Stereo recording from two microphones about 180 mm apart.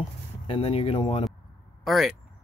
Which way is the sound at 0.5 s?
30° left (ahead or behind).